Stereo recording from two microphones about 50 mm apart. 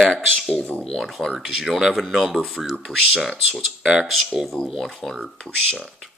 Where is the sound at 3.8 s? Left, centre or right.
Centre.